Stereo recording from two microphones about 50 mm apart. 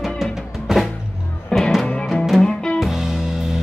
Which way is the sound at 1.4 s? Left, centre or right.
Centre.